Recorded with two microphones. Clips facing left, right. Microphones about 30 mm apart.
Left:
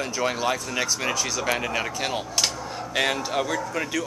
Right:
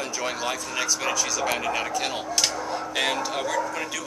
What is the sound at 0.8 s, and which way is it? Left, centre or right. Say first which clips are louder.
Speech: right 2 dB; left.